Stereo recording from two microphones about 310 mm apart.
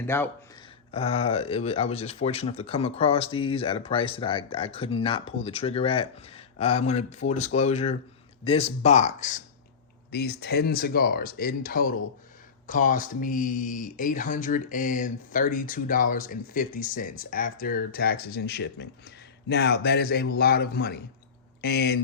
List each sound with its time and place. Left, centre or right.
0.0 s speech: centre
0.9 s a man's voice: centre